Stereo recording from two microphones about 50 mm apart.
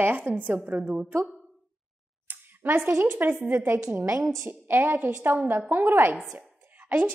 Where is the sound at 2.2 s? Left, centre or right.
Right.